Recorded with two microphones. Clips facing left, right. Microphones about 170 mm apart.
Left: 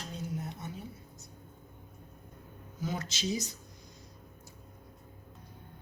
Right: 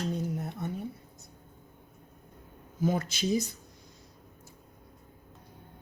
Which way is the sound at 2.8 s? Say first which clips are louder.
Right 7 dB; 50° right (ahead or behind).